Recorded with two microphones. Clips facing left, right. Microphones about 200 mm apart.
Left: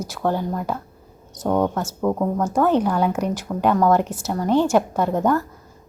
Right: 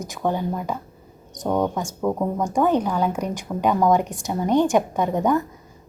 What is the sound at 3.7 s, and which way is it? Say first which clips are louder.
Speech: left 1 dB; 10° right (ahead or behind).